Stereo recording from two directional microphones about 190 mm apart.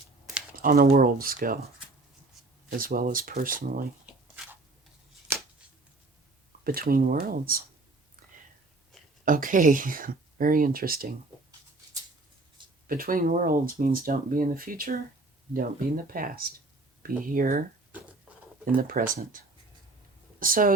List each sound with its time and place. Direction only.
0.5 s speech: 50° right (ahead or behind)
2.6 s speech: 50° right (ahead or behind)
4.1 s shuffling cards: 5° right (ahead or behind)
6.7 s speech: 50° right (ahead or behind)
9.2 s speech: 45° right (ahead or behind)
12.9 s speech: 50° right (ahead or behind)
20.4 s speech: 45° right (ahead or behind)